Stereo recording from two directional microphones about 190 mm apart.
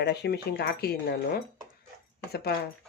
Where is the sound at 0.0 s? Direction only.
60° left (ahead or behind).